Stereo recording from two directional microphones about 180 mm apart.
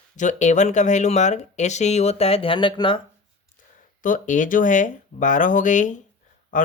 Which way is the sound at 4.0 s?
45° left (ahead or behind).